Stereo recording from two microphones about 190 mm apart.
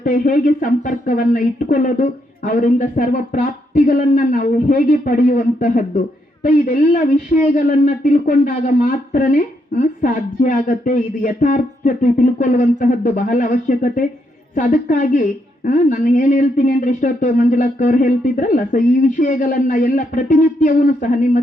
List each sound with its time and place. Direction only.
0.0 s a woman's voice: 45° left (ahead or behind)